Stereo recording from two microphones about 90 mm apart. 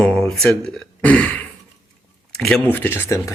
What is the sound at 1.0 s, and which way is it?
Speech, 15° left (ahead or behind).